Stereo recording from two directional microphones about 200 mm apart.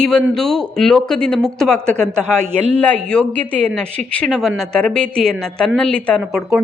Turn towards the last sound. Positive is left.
turn(degrees=5)  # may be behind; listen again after turning